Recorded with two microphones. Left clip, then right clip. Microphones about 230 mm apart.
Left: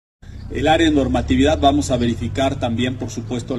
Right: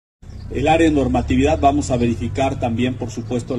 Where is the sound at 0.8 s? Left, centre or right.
Left.